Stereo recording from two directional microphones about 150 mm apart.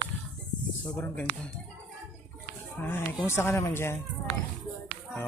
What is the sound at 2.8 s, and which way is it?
Speech, 15° left (ahead or behind).